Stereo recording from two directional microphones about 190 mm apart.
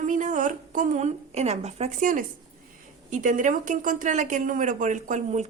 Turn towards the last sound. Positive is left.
turn(degrees=-40)  # may be behind; listen again after turning